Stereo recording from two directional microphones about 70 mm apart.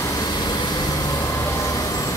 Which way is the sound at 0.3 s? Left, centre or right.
Left.